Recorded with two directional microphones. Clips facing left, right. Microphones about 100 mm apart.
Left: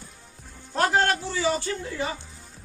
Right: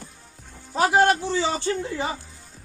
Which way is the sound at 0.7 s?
5° right (ahead or behind).